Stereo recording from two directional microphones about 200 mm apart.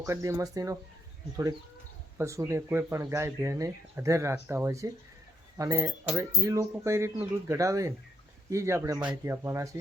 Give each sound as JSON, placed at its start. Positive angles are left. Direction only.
{"t": 0.0, "sound": "speech", "side_deg": -15}
{"t": 2.1, "sound": "speech", "side_deg": -15}